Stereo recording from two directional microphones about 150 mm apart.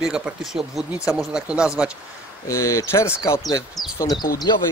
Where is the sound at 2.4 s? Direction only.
20° left (ahead or behind).